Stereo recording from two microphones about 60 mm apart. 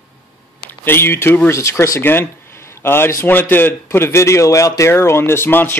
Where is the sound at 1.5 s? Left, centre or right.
Left.